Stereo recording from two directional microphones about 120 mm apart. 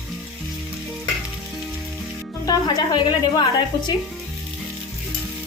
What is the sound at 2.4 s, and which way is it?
Speech, 35° left (ahead or behind).